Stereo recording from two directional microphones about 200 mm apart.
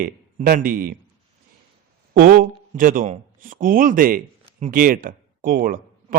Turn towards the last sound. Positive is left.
turn(degrees=-45)  # may be behind; listen again after turning